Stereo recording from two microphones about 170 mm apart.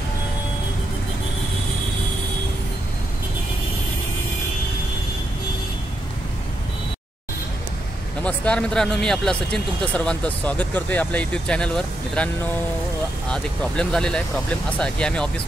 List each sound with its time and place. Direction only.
8.2 s speech: 5° left (ahead or behind)
13.3 s speech: 5° left (ahead or behind)